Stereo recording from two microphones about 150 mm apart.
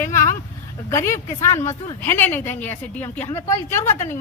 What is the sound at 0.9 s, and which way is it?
A woman's voice, 20° left (ahead or behind).